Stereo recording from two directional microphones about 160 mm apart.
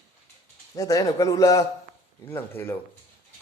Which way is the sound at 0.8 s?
20° left (ahead or behind).